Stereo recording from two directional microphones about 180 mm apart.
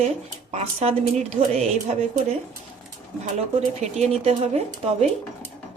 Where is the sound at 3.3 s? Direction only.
35° right (ahead or behind).